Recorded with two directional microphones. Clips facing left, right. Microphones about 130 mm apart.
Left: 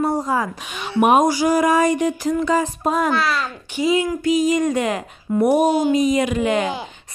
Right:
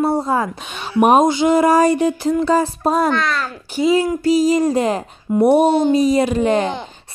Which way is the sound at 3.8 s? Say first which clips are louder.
Right 3 dB; 30° right (ahead or behind).